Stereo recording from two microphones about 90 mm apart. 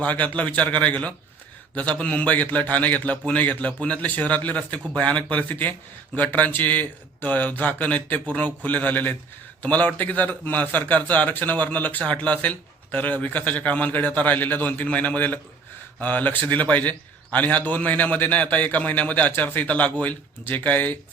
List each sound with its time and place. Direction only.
0.0 s a man's voice: 15° left (ahead or behind)